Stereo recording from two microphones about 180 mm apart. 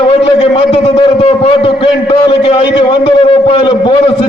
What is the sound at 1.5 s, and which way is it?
A man's voice, 30° left (ahead or behind).